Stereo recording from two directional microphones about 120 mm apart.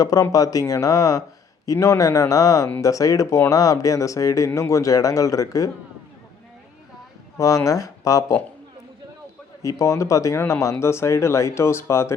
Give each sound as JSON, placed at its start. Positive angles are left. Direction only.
{"t": 0.2, "sound": "speech", "side_deg": 30}
{"t": 7.3, "sound": "speech", "side_deg": 25}
{"t": 9.6, "sound": "speech", "side_deg": 25}